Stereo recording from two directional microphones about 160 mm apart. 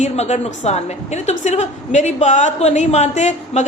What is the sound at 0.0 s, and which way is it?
A woman's voice, 45° left (ahead or behind).